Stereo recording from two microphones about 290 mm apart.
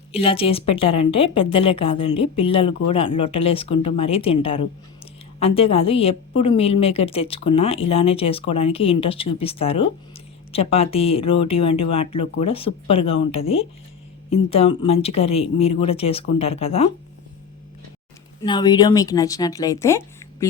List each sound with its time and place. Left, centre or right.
0.1 s a woman's voice: centre
18.3 s speech: centre